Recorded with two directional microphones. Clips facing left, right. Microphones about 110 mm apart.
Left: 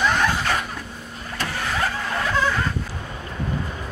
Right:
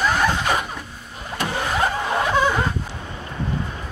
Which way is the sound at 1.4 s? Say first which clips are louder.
Right 3 dB; 20° right (ahead or behind).